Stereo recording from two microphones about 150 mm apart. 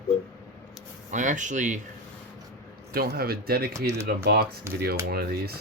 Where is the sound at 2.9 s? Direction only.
90° right.